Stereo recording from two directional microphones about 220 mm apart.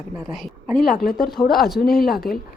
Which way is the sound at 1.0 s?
40° left (ahead or behind).